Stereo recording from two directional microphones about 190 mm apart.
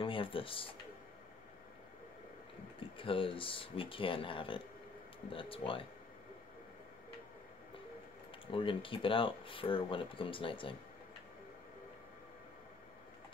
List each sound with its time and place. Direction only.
0.0 s speech: 25° left (ahead or behind)
3.0 s speech: 25° left (ahead or behind)
8.5 s speech: 30° left (ahead or behind)